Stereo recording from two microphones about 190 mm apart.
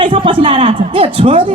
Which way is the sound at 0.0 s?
25° right (ahead or behind).